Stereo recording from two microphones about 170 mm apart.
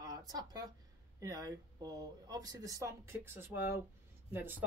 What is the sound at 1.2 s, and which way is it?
Speech, 20° right (ahead or behind).